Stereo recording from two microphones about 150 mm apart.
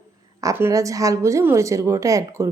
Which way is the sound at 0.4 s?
20° right (ahead or behind).